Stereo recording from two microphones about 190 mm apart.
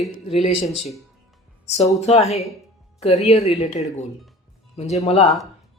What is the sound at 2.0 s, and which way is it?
Speech, 35° left (ahead or behind).